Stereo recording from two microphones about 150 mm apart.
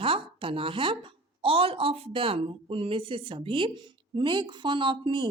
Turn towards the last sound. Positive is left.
turn(degrees=-30)  # may be behind; listen again after turning